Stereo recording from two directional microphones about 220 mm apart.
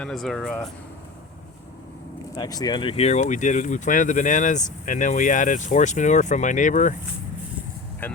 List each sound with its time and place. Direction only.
0.0 s speech: centre (ahead or behind)
2.3 s speech: 15° left (ahead or behind); by 6.9 s 35° left (ahead or behind)
8.0 s speech: 10° left (ahead or behind)